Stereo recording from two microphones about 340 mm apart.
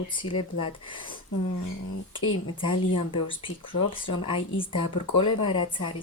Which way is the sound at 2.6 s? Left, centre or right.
Centre.